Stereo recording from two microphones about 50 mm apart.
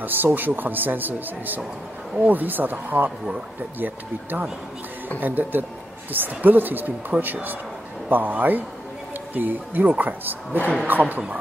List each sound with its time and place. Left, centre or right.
0.0 s speech: right